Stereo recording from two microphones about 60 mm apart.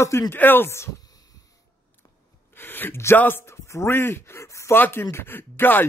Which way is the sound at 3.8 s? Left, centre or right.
Left.